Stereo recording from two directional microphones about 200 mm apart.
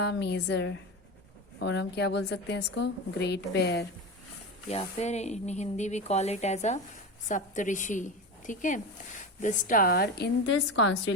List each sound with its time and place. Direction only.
0.0 s a woman's voice: 60° left (ahead or behind)
4.7 s speech: 30° left (ahead or behind); by 10.9 s 65° left (ahead or behind)